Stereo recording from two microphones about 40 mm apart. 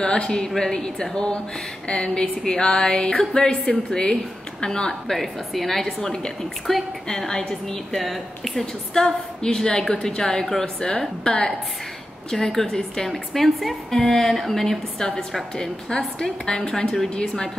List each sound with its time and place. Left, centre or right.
0.0 s a woman's voice: centre
5.0 s a woman's voice: centre
8.0 s a woman's voice: centre
8.9 s a woman's voice: centre